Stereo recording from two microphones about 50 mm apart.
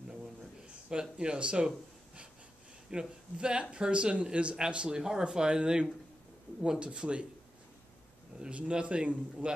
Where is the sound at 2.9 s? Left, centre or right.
Centre.